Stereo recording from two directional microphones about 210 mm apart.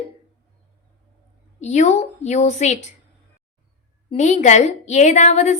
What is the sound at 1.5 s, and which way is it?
A woman's voice, 35° left (ahead or behind).